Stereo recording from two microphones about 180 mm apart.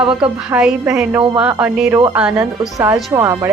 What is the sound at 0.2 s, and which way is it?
A woman's voice, 5° right (ahead or behind).